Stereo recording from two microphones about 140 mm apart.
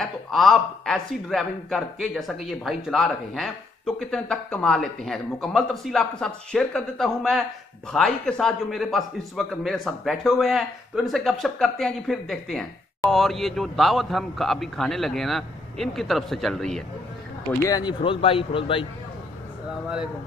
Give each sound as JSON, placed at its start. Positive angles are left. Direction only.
{"t": 0.0, "sound": "speech", "side_deg": 0}
{"t": 17.5, "sound": "speech", "side_deg": 25}